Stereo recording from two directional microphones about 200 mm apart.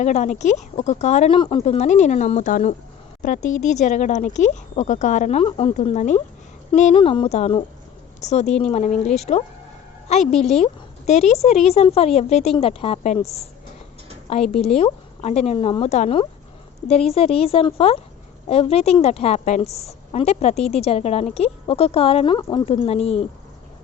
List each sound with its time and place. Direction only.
0.0 s a woman's voice: 35° left (ahead or behind)
14.5 s a woman's voice: 30° left (ahead or behind)